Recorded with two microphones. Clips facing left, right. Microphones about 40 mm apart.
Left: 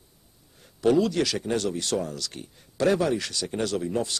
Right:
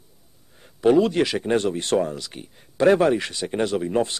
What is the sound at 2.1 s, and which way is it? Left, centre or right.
Speech, right.